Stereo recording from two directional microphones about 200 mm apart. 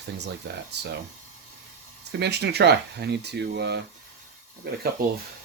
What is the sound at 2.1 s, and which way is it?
Speech, 55° right (ahead or behind).